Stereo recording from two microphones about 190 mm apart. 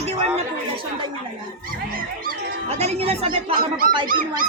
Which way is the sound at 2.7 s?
35° right (ahead or behind).